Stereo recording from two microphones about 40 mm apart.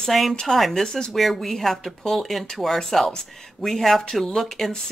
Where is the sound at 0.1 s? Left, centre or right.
Centre.